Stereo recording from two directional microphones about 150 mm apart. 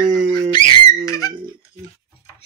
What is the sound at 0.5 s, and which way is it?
Squeak, 30° left (ahead or behind).